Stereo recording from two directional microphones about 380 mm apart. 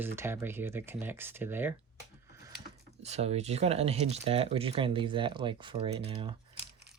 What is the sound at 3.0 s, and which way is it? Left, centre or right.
Speech, centre.